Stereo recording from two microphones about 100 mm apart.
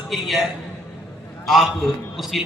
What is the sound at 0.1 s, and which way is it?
A man's voice, centre (ahead or behind).